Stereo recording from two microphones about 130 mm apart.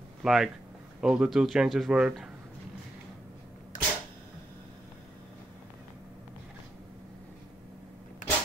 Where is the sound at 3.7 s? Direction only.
85° left.